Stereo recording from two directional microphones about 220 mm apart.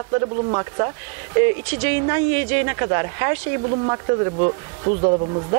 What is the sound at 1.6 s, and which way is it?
Speech, 15° right (ahead or behind).